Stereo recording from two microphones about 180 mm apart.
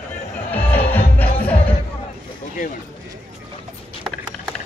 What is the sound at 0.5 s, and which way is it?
Music, 10° left (ahead or behind).